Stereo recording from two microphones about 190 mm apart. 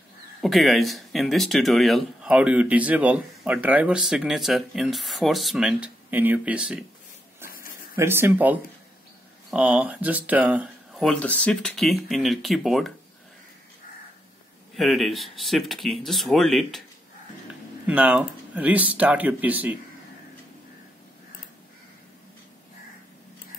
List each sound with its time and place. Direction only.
0.4 s speech: centre (ahead or behind)
7.4 s a sound: 50° left (ahead or behind)
7.9 s speech: 10° right (ahead or behind)
14.8 s speech: centre (ahead or behind)
17.8 s speech: 5° right (ahead or behind)